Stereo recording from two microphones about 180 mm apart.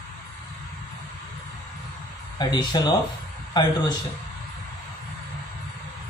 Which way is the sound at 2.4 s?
20° left (ahead or behind).